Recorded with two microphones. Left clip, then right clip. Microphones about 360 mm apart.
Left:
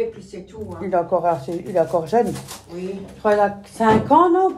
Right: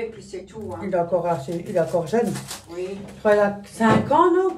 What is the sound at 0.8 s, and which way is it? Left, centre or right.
Speech, centre.